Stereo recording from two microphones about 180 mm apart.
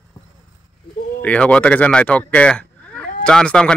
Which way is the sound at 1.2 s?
5° left (ahead or behind).